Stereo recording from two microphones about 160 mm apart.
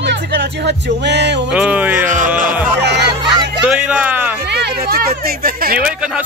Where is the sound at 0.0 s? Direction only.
90° right.